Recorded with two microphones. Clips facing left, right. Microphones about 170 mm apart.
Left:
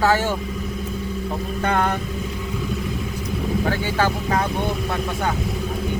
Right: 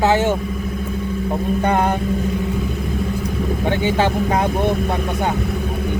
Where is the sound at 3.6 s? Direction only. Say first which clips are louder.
Right 6 dB; 20° right (ahead or behind).